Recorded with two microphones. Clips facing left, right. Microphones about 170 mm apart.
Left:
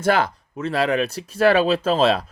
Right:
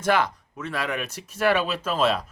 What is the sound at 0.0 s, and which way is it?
Speech, 30° left (ahead or behind).